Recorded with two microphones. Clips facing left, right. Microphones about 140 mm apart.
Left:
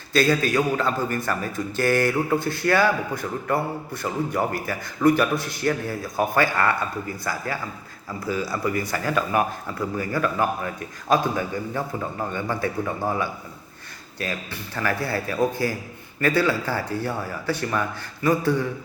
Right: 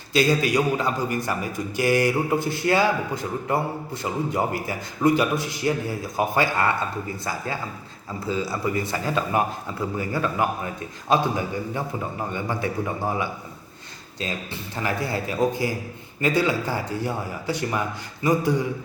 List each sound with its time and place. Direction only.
0.1 s a man's voice: 15° right (ahead or behind)